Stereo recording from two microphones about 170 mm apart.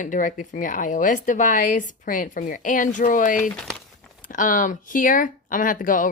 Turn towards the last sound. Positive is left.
turn(degrees=50)  # may be behind; listen again after turning